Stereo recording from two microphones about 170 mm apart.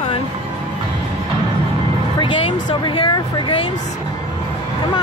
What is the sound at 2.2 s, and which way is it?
Speech, 30° left (ahead or behind).